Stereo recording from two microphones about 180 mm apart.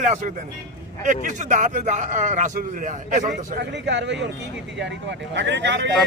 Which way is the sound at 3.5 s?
75° right (ahead or behind).